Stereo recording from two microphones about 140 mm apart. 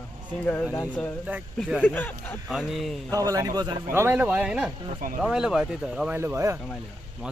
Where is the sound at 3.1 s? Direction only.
25° right (ahead or behind).